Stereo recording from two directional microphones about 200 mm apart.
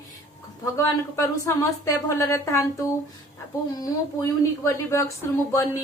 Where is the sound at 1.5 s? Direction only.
15° left (ahead or behind).